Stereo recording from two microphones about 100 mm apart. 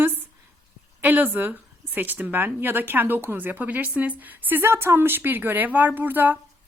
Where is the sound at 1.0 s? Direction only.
20° right (ahead or behind).